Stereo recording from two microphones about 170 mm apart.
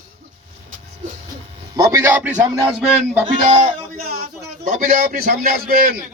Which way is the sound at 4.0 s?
60° right (ahead or behind).